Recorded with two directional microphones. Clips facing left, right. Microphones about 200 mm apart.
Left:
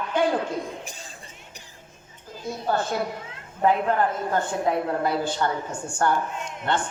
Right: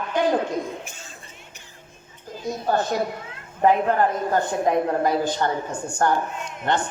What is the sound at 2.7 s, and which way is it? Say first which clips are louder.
Speech: right 3 dB; 40° right (ahead or behind).